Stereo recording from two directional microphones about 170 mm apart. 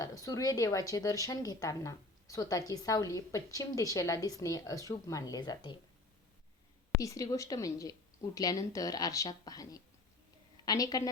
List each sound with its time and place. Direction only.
0.0 s a woman's voice: 20° left (ahead or behind)
7.0 s a woman's voice: 20° left (ahead or behind)